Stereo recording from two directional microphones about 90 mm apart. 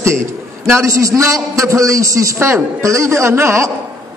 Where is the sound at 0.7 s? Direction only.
35° right (ahead or behind).